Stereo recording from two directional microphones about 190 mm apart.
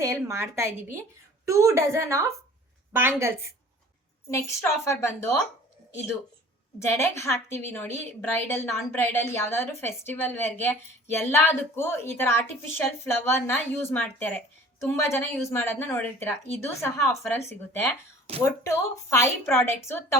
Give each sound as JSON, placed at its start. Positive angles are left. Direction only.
{"t": 0.0, "sound": "a woman's voice", "side_deg": -15}
{"t": 4.3, "sound": "a woman's voice", "side_deg": 15}
{"t": 6.7, "sound": "a woman's voice", "side_deg": 15}
{"t": 18.7, "sound": "a woman's voice", "side_deg": 15}